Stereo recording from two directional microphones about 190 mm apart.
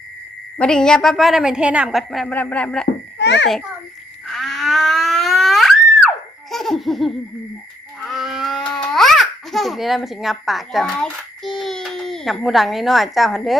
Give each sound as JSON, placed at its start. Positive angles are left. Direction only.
{"t": 0.6, "sound": "a woman's voice", "side_deg": 5}
{"t": 3.2, "sound": "a child's voice", "side_deg": 65}
{"t": 4.3, "sound": "a sound", "side_deg": 0}
{"t": 6.5, "sound": "laughter", "side_deg": 0}
{"t": 8.0, "sound": "babbling", "side_deg": 0}